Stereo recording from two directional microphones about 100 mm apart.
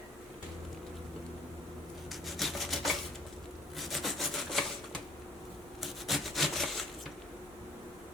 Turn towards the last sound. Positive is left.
turn(degrees=0)  # may be behind; listen again after turning